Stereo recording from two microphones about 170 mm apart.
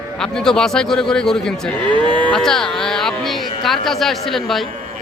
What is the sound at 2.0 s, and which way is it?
Moo, 30° right (ahead or behind).